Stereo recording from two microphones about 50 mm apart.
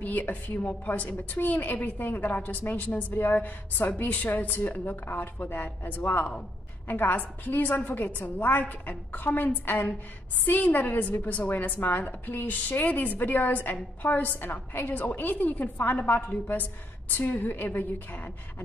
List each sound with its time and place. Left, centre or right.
0.0 s a woman's voice: left